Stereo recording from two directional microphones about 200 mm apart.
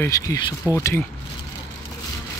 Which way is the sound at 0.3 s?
15° left (ahead or behind).